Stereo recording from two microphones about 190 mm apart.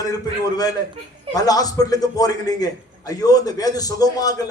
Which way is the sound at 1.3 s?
20° left (ahead or behind).